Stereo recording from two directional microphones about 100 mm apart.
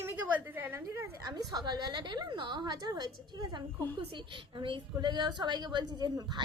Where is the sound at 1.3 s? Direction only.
40° right (ahead or behind).